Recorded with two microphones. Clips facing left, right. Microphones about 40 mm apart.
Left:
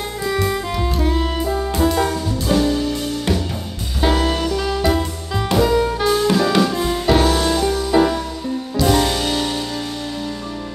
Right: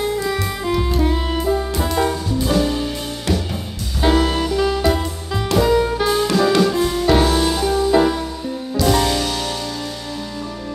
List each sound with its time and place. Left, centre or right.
0.4 s music: centre
4.0 s music: centre
9.2 s music: centre